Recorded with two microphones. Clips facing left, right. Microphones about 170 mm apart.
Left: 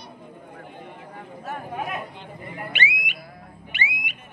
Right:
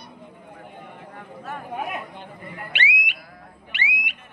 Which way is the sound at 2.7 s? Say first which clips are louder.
Right 2 dB; 70° right (ahead or behind).